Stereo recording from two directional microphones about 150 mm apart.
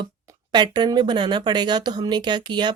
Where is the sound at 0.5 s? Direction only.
30° right (ahead or behind).